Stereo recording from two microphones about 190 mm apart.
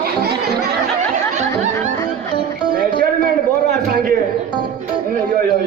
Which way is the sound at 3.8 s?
50° right (ahead or behind).